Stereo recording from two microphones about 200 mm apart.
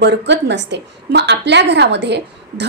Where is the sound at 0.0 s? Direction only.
60° right (ahead or behind).